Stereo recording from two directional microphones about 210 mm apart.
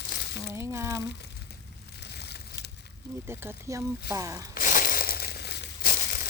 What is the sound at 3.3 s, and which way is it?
Speech, 10° right (ahead or behind).